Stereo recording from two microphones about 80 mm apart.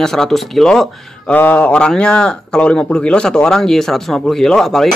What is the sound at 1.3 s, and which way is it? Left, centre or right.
Speech, left.